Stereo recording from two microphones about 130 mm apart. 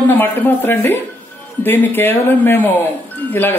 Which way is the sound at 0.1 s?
15° left (ahead or behind).